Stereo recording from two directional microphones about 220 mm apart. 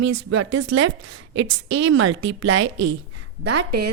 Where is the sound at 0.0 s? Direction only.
65° right (ahead or behind).